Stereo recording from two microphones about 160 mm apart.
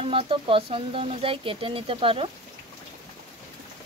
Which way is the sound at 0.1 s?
35° right (ahead or behind).